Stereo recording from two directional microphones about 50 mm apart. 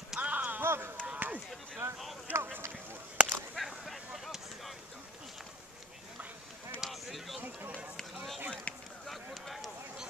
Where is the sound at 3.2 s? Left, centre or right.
Right.